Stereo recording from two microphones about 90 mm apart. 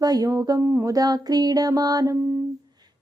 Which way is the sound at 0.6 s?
30° right (ahead or behind).